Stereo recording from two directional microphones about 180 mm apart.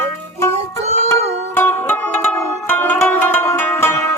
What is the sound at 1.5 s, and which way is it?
Music, 10° left (ahead or behind).